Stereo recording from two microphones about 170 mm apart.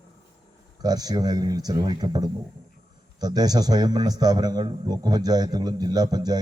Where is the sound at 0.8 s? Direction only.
20° right (ahead or behind).